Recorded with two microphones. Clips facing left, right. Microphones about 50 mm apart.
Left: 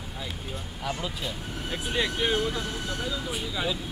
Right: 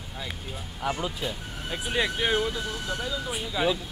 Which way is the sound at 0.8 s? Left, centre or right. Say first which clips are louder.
Right 3 dB; centre.